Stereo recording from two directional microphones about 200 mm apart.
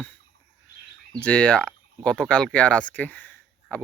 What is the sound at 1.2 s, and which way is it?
Speech, 5° left (ahead or behind).